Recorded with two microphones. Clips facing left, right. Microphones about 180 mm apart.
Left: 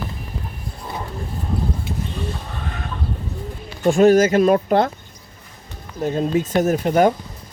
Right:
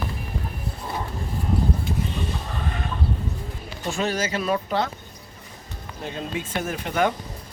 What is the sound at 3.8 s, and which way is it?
Speech, 50° left (ahead or behind).